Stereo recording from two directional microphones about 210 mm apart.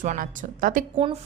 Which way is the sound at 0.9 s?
25° right (ahead or behind).